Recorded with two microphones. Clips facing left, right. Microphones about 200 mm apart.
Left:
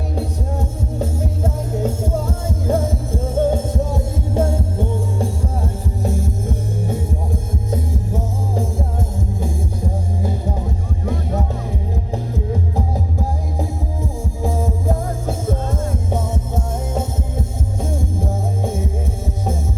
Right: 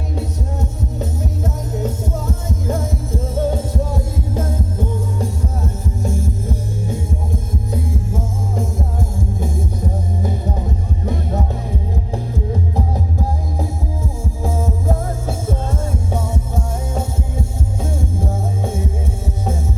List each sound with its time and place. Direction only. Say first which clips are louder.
0.2 s music: left 2 dB; 30° left (ahead or behind)
14.4 s music: even; 15° left (ahead or behind)
17.8 s music: even; 15° left (ahead or behind)